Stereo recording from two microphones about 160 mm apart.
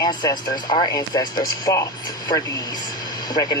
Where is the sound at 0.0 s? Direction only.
25° left (ahead or behind).